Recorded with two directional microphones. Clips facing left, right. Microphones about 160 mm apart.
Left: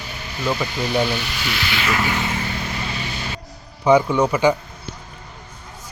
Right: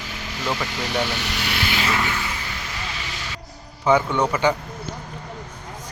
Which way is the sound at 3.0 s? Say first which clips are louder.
Left 5 dB; 90° right.